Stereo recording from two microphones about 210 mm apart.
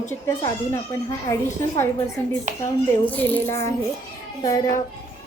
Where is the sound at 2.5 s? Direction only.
35° right (ahead or behind).